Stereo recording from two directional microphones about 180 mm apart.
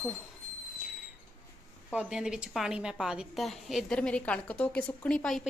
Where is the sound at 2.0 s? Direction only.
5° right (ahead or behind).